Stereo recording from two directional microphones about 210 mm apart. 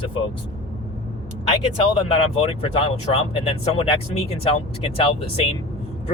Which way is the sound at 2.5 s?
25° left (ahead or behind).